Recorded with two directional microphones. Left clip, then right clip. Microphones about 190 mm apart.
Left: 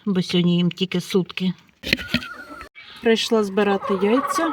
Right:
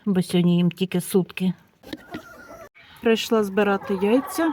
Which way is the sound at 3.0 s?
20° left (ahead or behind).